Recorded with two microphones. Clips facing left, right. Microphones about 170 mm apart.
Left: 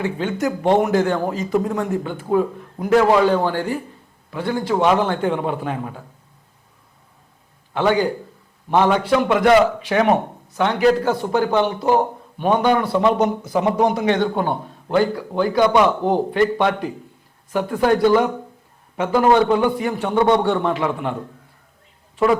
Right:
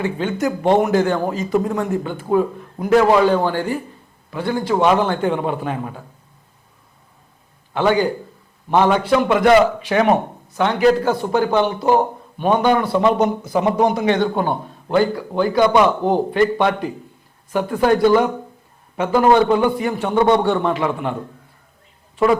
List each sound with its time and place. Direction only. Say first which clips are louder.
0.0 s a man's voice: right 1 dB; 10° right (ahead or behind)
7.7 s a man's voice: right 1 dB; 10° right (ahead or behind)
20.1 s a man's voice: right 1 dB; 35° right (ahead or behind)
20.4 s a man's voice: right 1 dB; 10° right (ahead or behind)